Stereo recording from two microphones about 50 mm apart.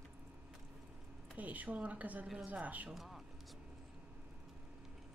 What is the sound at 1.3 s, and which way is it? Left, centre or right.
A woman's voice, right.